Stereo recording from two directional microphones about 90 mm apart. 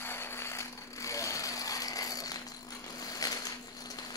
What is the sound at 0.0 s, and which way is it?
Ratchet, 25° left (ahead or behind).